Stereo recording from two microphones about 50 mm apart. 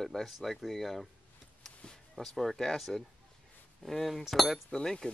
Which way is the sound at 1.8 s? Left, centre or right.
Centre.